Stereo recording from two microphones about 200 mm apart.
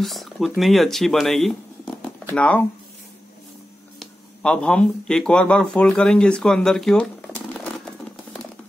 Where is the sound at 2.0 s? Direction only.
5° left (ahead or behind).